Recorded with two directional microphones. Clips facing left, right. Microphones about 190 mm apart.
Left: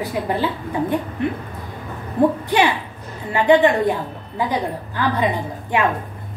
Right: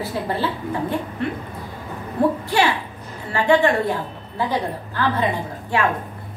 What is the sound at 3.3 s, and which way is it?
A woman's voice, 20° left (ahead or behind).